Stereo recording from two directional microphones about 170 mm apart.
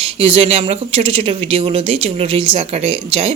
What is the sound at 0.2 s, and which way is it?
Speech, 35° right (ahead or behind).